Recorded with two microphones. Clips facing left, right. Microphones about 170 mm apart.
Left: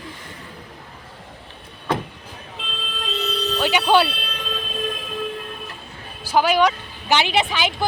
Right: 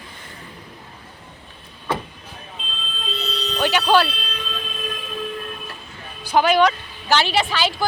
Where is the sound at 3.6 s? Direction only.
15° left (ahead or behind).